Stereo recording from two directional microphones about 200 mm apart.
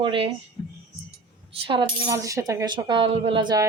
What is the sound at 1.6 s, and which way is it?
Speech, 25° right (ahead or behind).